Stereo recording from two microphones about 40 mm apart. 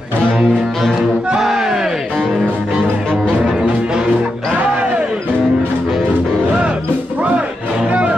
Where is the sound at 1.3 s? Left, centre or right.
Centre.